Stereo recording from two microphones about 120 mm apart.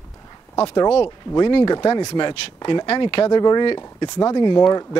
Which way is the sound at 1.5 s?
35° left (ahead or behind).